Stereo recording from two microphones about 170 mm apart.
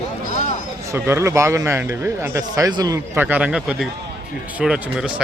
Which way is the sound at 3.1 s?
10° right (ahead or behind).